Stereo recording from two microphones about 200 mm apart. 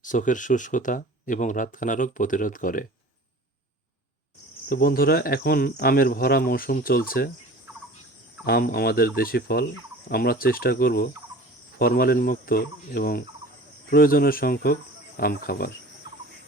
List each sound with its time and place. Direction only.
0.0 s speech: 40° left (ahead or behind)
4.7 s speech: 45° left (ahead or behind)
8.4 s speech: 50° left (ahead or behind)